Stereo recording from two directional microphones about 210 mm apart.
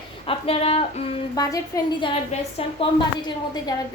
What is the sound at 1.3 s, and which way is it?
A woman's voice, 15° left (ahead or behind).